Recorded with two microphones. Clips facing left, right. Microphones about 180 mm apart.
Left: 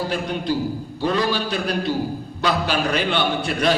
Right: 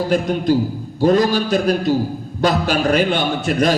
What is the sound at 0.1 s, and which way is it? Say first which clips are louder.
A man's voice: right 7 dB; 45° right (ahead or behind).